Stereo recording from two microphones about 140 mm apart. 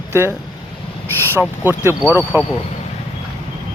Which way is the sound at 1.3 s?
15° right (ahead or behind).